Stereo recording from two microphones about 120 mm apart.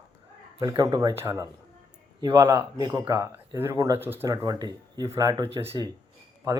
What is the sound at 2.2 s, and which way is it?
Speech, 35° right (ahead or behind).